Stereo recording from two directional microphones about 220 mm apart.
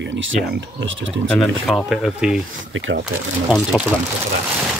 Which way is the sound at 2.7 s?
60° right (ahead or behind).